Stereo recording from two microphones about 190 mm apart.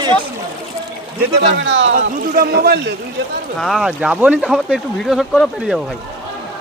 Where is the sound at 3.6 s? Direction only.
Centre (ahead or behind).